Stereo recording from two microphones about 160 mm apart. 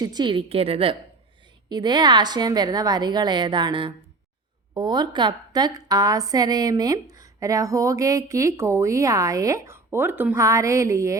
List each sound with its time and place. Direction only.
0.0 s a woman's voice: 25° right (ahead or behind)